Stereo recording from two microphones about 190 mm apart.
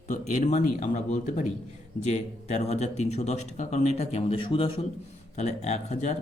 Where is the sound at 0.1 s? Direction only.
40° left (ahead or behind).